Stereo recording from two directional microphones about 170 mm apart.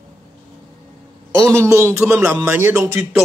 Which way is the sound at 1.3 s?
15° right (ahead or behind).